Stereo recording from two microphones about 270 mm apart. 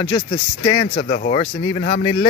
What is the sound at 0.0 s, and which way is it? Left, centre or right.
Speech, centre.